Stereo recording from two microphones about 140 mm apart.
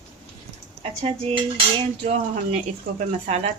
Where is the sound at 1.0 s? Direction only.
40° right (ahead or behind).